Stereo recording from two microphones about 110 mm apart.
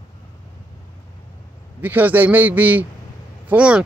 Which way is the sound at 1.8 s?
15° right (ahead or behind).